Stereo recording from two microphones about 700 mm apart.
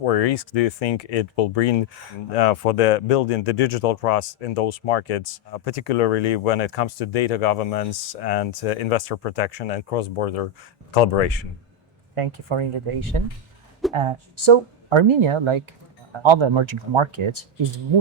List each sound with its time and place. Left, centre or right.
0.0 s speech: left
12.1 s speech: right
13.8 s a sound: centre
14.5 s speech: right